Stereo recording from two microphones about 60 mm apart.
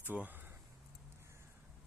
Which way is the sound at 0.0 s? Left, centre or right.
Right.